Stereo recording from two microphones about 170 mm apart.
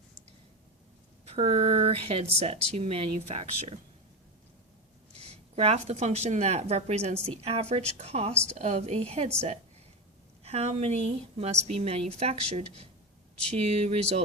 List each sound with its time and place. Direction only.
1.2 s speech: 35° right (ahead or behind)
5.2 s speech: 35° right (ahead or behind)
8.3 s a woman's voice: 5° left (ahead or behind)
8.5 s speech: 40° right (ahead or behind)